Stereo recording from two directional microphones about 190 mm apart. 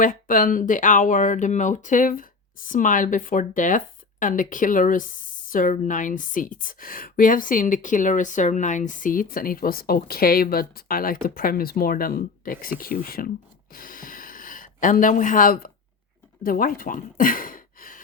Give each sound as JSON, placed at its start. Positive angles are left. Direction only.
{"t": 0.0, "sound": "a woman's voice", "side_deg": 45}
{"t": 13.7, "sound": "a sound", "side_deg": 50}
{"t": 16.4, "sound": "speech", "side_deg": 50}